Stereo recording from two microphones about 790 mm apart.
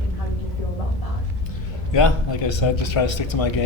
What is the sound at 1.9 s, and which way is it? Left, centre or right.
Speech, left.